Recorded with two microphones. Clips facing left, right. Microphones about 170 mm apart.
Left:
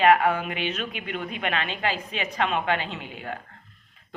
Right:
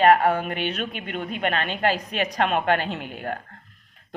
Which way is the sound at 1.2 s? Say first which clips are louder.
Right 4 dB; 45° right (ahead or behind).